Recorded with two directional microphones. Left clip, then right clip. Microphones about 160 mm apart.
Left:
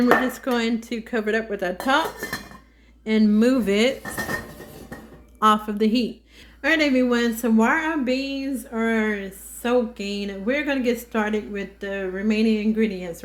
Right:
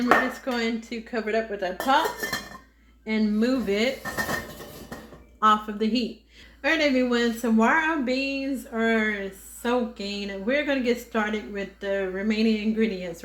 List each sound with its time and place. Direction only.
0.4 s speech: 70° left (ahead or behind); by 2.0 s 90° left
3.1 s speech: 80° left
5.4 s a woman's voice: 70° left (ahead or behind)
6.6 s speech: 50° left (ahead or behind)